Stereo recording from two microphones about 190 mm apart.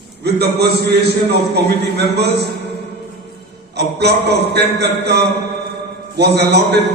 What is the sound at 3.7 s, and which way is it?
A man's voice, 60° right (ahead or behind).